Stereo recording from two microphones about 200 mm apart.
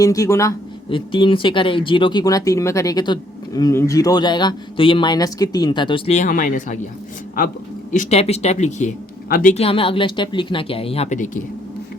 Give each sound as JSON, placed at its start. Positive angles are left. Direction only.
{"t": 0.0, "sound": "speech", "side_deg": 15}
{"t": 7.9, "sound": "speech", "side_deg": 30}